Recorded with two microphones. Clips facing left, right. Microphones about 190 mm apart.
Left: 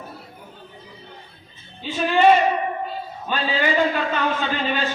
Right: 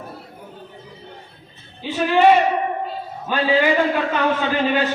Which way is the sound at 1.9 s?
65° right (ahead or behind).